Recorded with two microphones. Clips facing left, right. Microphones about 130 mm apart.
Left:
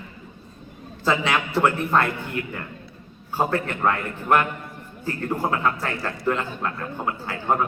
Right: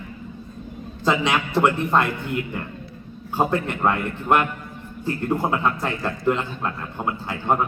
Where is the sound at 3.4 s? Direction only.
15° right (ahead or behind).